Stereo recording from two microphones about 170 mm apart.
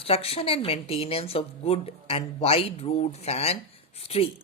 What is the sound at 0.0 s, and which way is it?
Speech, 35° left (ahead or behind).